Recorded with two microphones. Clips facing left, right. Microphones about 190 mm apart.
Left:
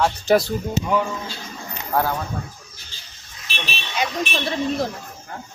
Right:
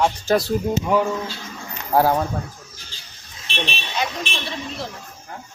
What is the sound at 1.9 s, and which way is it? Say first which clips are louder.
Speech: right 4 dB; 30° right (ahead or behind).